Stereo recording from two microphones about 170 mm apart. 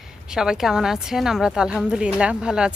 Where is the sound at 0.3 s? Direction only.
5° right (ahead or behind).